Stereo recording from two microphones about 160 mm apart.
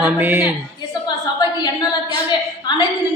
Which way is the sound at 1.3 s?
25° left (ahead or behind).